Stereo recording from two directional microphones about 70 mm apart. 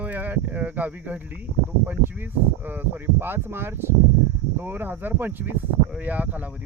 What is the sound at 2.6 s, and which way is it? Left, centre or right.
Speech, right.